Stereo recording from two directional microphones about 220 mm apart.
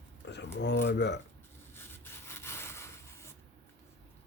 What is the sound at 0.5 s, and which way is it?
Speech, 50° left (ahead or behind).